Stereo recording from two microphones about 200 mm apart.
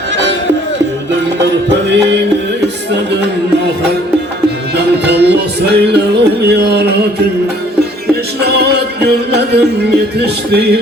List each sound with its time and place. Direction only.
2.9 s music: 60° right (ahead or behind)
4.4 s music: 55° right (ahead or behind)